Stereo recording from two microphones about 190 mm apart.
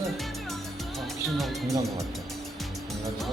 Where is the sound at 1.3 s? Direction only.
Centre (ahead or behind).